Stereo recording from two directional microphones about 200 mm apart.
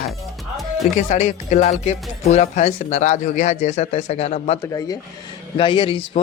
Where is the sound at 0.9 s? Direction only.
35° left (ahead or behind).